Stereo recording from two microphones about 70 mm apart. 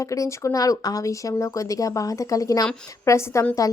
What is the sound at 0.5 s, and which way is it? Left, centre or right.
A woman's voice, left.